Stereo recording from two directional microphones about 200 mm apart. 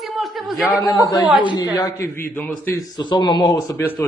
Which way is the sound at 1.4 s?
20° left (ahead or behind).